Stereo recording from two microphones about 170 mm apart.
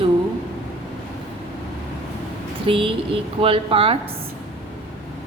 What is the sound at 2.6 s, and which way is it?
A woman's voice, 30° right (ahead or behind).